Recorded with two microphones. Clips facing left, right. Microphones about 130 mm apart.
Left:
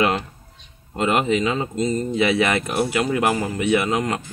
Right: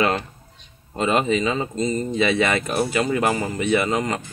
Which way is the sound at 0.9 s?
5° left (ahead or behind).